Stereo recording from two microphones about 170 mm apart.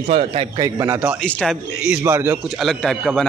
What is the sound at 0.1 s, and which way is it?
Speech, 35° right (ahead or behind).